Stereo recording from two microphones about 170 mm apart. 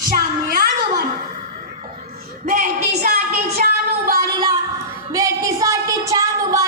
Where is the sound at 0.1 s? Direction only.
55° right (ahead or behind).